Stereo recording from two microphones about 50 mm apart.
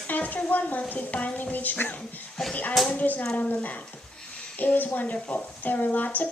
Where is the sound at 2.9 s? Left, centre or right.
Left.